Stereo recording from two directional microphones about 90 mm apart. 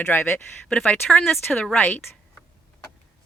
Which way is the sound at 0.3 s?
10° left (ahead or behind).